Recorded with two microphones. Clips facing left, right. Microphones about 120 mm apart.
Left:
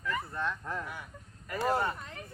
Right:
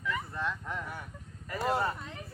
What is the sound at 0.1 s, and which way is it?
Speech, centre (ahead or behind).